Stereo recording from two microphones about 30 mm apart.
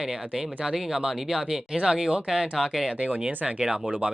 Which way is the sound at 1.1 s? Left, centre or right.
Centre.